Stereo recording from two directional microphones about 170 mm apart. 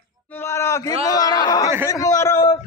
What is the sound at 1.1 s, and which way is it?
A man's voice, 20° left (ahead or behind).